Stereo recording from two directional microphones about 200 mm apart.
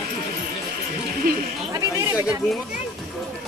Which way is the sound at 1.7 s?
15° right (ahead or behind).